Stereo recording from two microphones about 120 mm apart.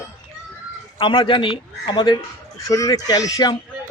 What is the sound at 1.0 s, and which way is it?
Speech, 45° left (ahead or behind).